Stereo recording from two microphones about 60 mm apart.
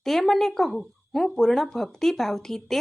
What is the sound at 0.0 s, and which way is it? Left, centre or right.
Speech, centre.